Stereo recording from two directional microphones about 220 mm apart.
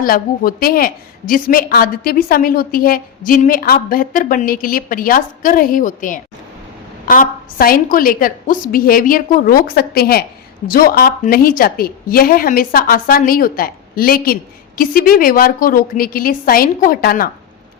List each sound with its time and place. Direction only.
0.0 s a woman's voice: 40° left (ahead or behind)